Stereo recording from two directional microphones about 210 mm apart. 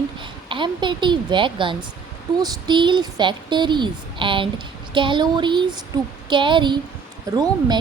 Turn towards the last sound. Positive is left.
turn(degrees=-20)  # may be behind; listen again after turning